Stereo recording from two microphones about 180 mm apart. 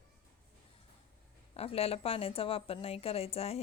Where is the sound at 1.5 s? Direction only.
35° left (ahead or behind).